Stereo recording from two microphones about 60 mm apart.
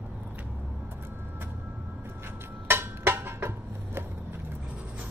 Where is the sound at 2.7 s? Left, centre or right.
Right.